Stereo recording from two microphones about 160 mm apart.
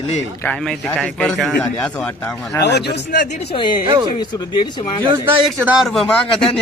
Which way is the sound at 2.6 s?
90° left.